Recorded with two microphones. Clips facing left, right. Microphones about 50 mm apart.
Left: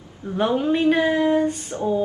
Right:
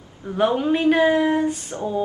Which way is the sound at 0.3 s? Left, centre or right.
Right.